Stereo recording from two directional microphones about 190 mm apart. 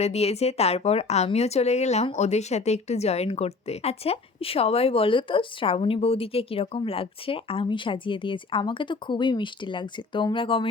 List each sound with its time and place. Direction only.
0.0 s a woman's voice: 35° left (ahead or behind)